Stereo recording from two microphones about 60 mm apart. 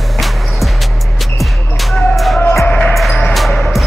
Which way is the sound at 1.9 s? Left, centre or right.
Centre.